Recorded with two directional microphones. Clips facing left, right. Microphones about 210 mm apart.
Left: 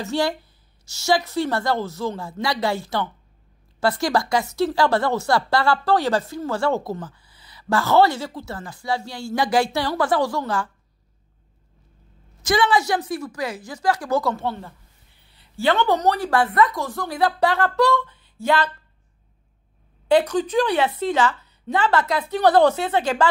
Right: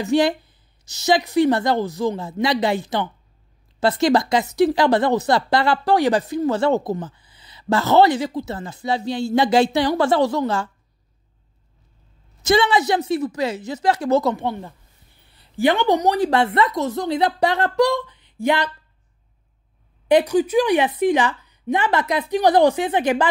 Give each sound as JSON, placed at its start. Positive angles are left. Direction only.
{"t": 0.0, "sound": "a woman's voice", "side_deg": -20}
{"t": 12.4, "sound": "a woman's voice", "side_deg": -25}
{"t": 20.1, "sound": "a woman's voice", "side_deg": -15}